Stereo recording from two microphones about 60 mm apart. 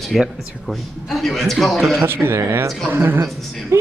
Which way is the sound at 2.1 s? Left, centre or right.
Right.